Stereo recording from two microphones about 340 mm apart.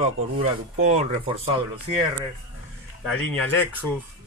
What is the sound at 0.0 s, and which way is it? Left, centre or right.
Speech, centre.